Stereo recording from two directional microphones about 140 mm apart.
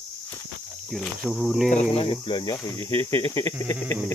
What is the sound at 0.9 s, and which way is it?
Cricket, centre (ahead or behind).